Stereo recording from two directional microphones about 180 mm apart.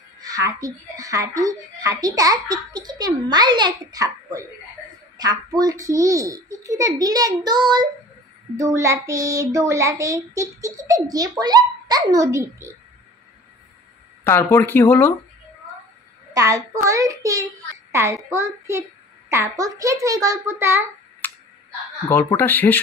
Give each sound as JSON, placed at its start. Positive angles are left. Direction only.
{"t": 0.2, "sound": "a woman's voice", "side_deg": -20}
{"t": 8.5, "sound": "child singing", "side_deg": -15}
{"t": 14.2, "sound": "speech", "side_deg": 15}
{"t": 16.3, "sound": "child singing", "side_deg": -20}
{"t": 21.2, "sound": "clicking", "side_deg": 10}
{"t": 22.1, "sound": "speech", "side_deg": 10}